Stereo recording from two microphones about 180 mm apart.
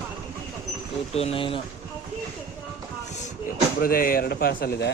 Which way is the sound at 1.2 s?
30° left (ahead or behind).